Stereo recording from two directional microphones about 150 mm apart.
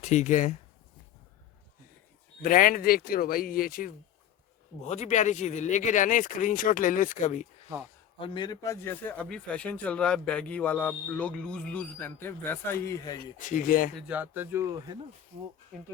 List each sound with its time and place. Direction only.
0.0 s speech: 55° left (ahead or behind)
2.4 s speech: 65° left (ahead or behind)
4.9 s speech: 50° left (ahead or behind)
8.2 s speech: 30° left (ahead or behind)
13.4 s speech: 60° left (ahead or behind)
14.1 s speech: 10° right (ahead or behind)
15.7 s speech: 5° left (ahead or behind)